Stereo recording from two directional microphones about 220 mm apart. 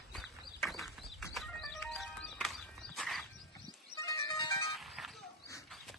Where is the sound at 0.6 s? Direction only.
Centre (ahead or behind).